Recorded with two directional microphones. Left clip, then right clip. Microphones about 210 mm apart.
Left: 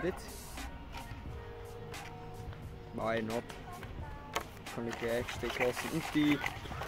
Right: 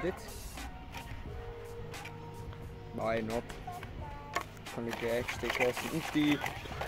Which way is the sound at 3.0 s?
5° right (ahead or behind).